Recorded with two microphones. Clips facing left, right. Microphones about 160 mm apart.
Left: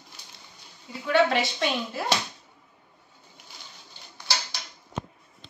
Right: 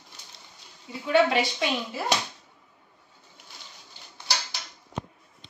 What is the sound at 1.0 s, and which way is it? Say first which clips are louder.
Speech: right 1 dB; 10° right (ahead or behind).